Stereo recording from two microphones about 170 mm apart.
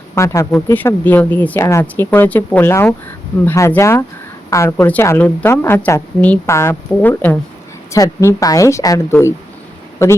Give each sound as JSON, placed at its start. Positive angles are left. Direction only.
{"t": 0.1, "sound": "a woman's voice", "side_deg": 15}